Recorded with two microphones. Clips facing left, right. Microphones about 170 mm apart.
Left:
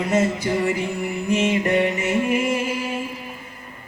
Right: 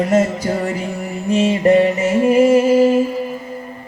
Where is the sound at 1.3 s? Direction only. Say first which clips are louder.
Right 7 dB; 35° right (ahead or behind).